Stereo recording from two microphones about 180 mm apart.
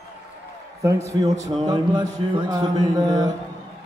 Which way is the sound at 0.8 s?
15° right (ahead or behind).